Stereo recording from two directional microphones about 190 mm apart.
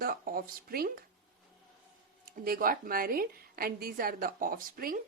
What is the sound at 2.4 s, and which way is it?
A woman's voice, 50° right (ahead or behind).